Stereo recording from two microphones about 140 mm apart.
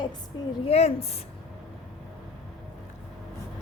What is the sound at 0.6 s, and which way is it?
Speech, 50° left (ahead or behind).